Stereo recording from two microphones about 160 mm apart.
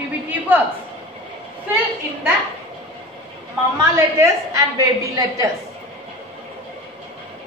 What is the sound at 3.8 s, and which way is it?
Speech, 20° right (ahead or behind).